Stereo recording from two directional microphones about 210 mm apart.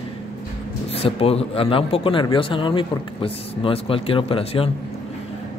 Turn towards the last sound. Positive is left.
turn(degrees=25)  # may be behind; listen again after turning